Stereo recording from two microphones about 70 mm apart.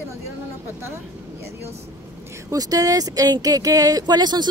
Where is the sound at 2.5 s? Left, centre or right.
Right.